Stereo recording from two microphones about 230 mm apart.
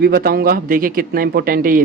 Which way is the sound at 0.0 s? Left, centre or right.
Right.